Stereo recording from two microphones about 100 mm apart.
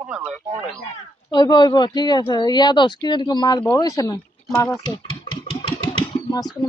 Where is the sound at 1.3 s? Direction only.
45° left (ahead or behind); by 4.8 s 25° left (ahead or behind).